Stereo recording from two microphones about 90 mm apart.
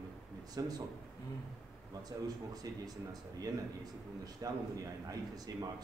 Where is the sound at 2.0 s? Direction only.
45° right (ahead or behind).